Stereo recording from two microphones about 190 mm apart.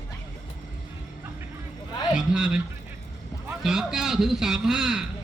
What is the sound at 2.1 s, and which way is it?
Speech, 5° right (ahead or behind).